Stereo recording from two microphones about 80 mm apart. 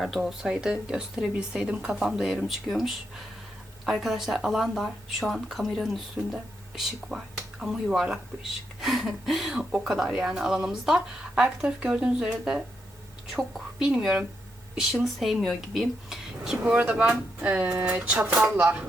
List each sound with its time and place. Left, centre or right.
0.0 s speech: centre
16.7 s speech: centre